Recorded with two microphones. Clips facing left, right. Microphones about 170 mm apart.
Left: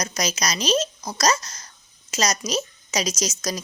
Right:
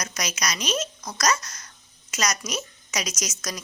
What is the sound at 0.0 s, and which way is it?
Speech, 30° left (ahead or behind).